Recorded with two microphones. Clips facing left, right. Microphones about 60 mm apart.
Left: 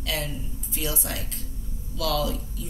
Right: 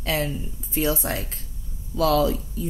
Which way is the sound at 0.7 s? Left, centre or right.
Right.